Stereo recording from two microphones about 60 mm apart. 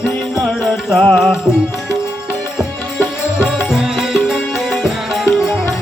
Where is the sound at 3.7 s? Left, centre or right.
Centre.